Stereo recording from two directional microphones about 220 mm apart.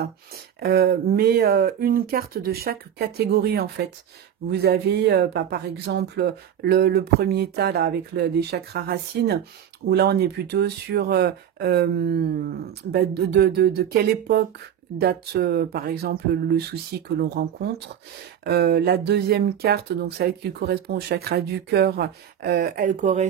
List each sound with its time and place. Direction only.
0.6 s speech: 45° right (ahead or behind)